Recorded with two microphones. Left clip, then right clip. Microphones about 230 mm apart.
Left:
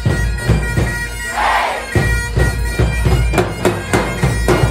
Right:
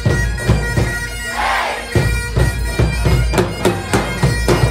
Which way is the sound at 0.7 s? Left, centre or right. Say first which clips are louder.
Even; centre.